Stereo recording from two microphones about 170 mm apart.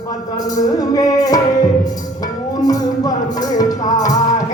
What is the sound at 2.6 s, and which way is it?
Music, 20° left (ahead or behind).